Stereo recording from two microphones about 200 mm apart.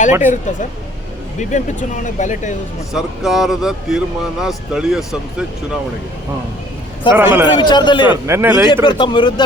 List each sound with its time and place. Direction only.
0.2 s speech: 40° left (ahead or behind)
2.9 s speech: centre (ahead or behind)
7.2 s speech: 10° right (ahead or behind)
7.5 s speech: 20° left (ahead or behind)
8.1 s speech: 10° right (ahead or behind)
8.7 s speech: 25° left (ahead or behind)